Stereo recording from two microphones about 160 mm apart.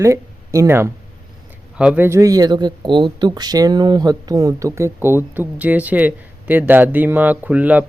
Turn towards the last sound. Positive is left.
turn(degrees=-10)  # may be behind; listen again after turning